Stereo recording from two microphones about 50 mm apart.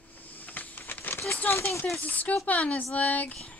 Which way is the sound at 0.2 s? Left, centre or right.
Left.